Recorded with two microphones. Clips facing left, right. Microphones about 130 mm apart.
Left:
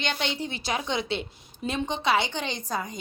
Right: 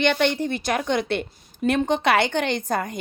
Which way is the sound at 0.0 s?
60° right (ahead or behind).